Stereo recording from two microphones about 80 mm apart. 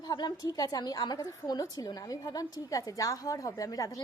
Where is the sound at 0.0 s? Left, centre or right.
Left.